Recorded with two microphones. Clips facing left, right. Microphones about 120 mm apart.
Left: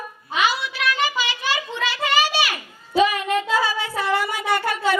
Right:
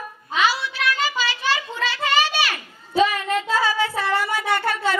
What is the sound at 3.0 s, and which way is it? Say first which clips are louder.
Child singing: left 1 dB; 20° left (ahead or behind).